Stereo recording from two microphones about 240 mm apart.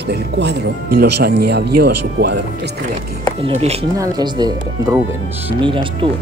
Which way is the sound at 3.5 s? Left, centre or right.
Right.